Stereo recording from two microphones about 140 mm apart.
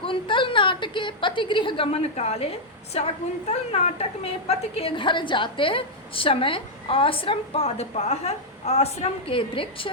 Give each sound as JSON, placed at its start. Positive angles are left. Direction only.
{"t": 0.0, "sound": "a woman's voice", "side_deg": 35}